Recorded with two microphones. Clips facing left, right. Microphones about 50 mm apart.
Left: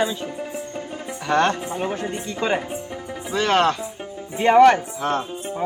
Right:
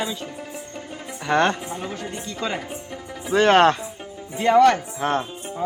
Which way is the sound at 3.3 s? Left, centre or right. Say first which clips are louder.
Right 4 dB; right.